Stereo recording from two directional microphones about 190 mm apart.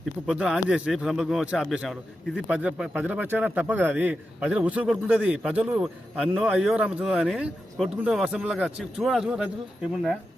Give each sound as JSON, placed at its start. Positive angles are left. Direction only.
{"t": 0.3, "sound": "a man's voice", "side_deg": 0}